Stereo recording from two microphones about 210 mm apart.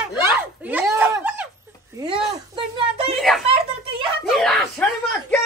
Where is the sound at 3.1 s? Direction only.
Centre (ahead or behind).